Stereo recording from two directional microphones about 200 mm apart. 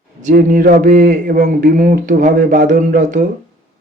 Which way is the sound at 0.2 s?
40° right (ahead or behind).